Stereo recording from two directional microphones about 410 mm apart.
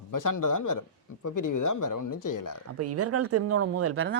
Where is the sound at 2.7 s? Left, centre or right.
Right.